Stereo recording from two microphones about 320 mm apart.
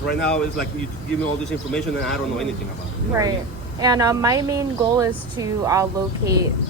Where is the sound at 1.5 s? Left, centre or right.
Centre.